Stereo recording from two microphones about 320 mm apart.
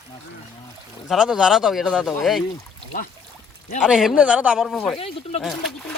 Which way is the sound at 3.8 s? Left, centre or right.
Centre.